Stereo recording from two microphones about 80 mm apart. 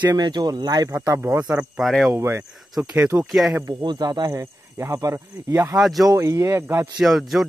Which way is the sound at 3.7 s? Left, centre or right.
Right.